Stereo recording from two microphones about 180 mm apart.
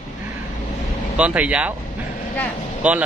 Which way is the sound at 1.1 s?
5° right (ahead or behind).